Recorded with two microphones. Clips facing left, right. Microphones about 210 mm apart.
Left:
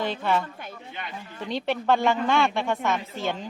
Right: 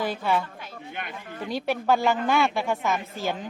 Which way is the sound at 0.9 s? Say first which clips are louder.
Right 2 dB; 50° right (ahead or behind).